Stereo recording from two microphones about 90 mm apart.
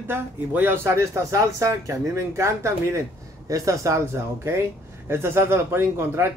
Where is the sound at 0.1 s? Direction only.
20° right (ahead or behind).